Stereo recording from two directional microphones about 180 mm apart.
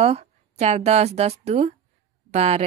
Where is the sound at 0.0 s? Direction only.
35° right (ahead or behind).